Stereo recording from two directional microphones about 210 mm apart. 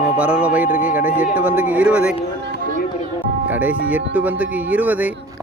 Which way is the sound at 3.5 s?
5° right (ahead or behind).